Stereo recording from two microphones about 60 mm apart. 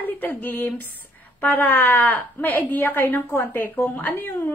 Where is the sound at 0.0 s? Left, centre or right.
Left.